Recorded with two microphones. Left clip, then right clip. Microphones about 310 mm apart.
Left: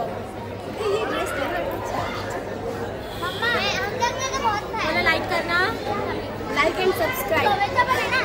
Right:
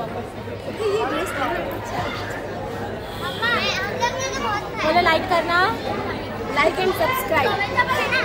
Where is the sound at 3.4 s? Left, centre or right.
Left.